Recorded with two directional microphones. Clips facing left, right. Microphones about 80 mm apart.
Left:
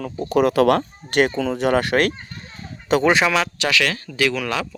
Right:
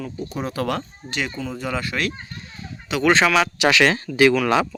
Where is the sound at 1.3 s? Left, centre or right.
Left.